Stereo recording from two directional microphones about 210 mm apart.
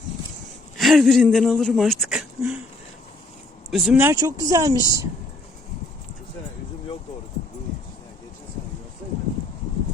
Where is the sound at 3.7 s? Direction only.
Centre (ahead or behind).